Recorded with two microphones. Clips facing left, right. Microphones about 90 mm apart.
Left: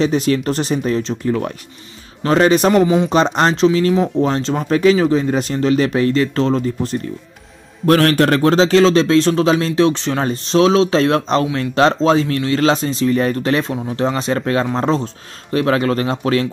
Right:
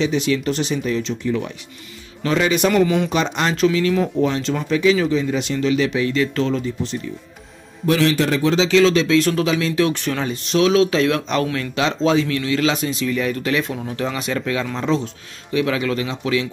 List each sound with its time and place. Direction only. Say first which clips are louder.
0.0 s speech: left 3 dB; 40° left (ahead or behind)
7.8 s speech: left 5 dB; 55° left (ahead or behind)